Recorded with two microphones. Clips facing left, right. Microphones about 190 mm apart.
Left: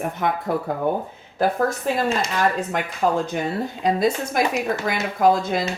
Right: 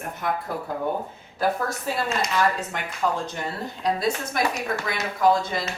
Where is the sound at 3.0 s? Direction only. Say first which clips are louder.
Left 4 dB; 50° left (ahead or behind).